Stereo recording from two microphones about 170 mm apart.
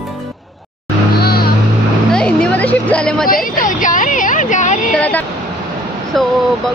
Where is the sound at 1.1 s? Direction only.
65° left (ahead or behind).